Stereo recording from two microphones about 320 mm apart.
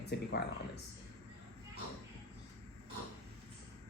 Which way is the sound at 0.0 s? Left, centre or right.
Left.